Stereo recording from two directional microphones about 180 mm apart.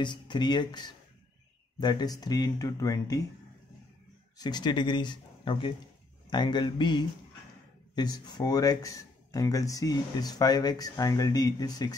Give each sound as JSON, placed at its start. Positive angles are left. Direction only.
{"t": 0.0, "sound": "speech", "side_deg": 25}
{"t": 4.4, "sound": "speech", "side_deg": 25}